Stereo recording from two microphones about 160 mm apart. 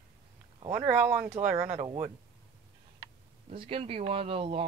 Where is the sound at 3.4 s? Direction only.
35° right (ahead or behind).